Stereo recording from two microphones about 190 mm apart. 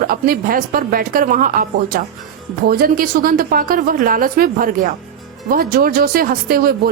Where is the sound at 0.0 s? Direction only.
50° right (ahead or behind).